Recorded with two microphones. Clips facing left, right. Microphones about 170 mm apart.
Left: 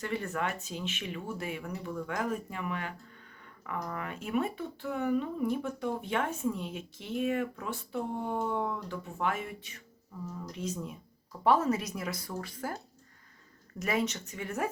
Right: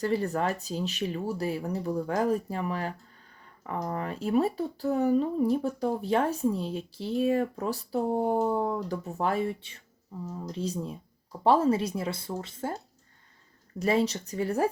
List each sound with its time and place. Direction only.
0.0 s speech: 35° right (ahead or behind)